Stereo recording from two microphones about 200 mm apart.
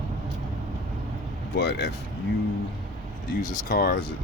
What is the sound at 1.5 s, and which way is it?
Speech, 55° left (ahead or behind).